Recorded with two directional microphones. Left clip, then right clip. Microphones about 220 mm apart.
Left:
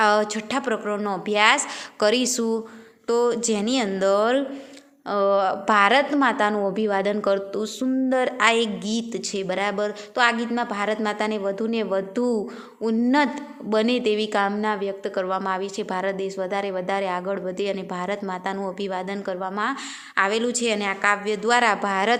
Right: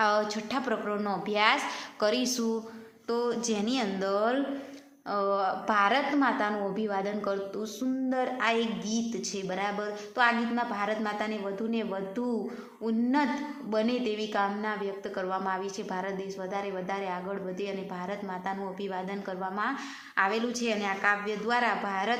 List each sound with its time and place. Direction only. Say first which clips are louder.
0.0 s a woman's voice: left 7 dB; 35° left (ahead or behind)